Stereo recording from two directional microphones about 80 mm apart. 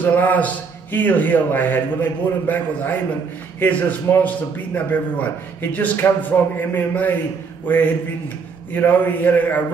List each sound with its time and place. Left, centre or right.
0.0 s a man's voice: centre